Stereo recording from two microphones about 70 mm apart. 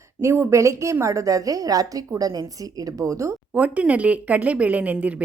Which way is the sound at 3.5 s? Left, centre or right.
Right.